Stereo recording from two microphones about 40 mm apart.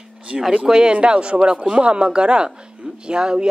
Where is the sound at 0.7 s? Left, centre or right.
Centre.